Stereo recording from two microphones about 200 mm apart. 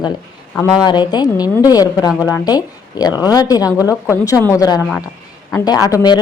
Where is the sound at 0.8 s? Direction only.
20° left (ahead or behind).